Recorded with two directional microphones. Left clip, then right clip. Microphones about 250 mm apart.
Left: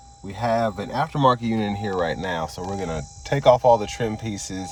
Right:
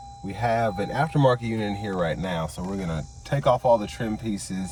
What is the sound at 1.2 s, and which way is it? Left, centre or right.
Speech, centre.